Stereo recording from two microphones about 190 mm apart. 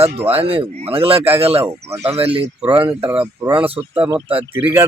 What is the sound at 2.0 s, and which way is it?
Speech, 30° right (ahead or behind).